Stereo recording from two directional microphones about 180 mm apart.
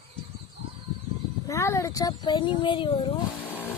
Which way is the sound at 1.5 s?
15° left (ahead or behind).